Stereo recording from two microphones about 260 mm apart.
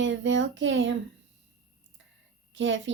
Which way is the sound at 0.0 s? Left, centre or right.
Right.